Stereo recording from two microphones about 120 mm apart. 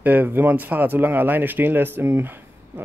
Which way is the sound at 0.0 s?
15° right (ahead or behind).